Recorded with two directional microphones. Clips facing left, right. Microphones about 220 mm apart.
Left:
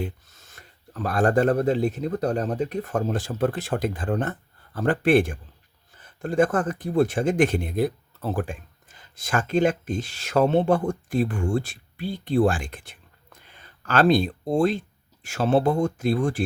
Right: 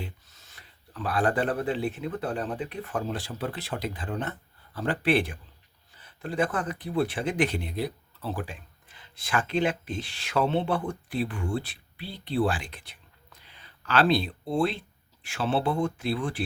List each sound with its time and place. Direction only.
0.0 s speech: 50° left (ahead or behind)